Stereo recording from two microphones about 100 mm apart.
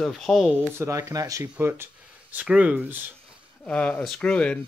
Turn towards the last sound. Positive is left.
turn(degrees=10)  # may be behind; listen again after turning